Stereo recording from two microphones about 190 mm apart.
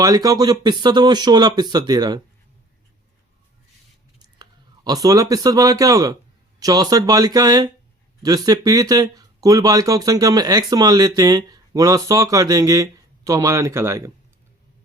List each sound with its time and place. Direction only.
0.0 s speech: 20° right (ahead or behind)
4.4 s speech: 20° right (ahead or behind)